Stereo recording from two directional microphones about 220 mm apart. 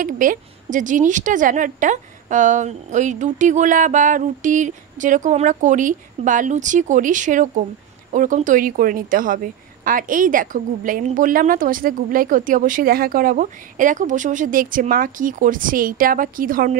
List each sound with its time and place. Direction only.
0.0 s a woman's voice: 40° right (ahead or behind)